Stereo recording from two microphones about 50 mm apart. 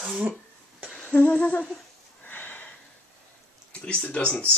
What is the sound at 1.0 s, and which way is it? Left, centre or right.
Speech, left.